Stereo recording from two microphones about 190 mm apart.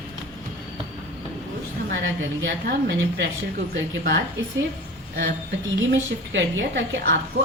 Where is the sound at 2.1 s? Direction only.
70° right (ahead or behind).